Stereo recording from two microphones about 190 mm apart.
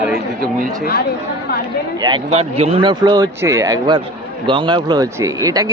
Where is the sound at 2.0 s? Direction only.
25° right (ahead or behind).